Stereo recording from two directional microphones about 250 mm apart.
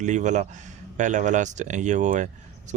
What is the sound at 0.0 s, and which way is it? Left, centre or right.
Speech, right.